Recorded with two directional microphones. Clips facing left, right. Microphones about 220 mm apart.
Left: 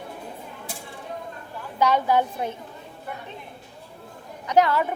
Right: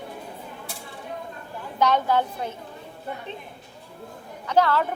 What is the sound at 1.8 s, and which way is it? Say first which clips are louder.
Speech: left 1 dB; 10° left (ahead or behind).